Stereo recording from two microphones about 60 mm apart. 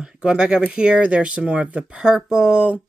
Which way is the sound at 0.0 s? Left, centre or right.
Centre.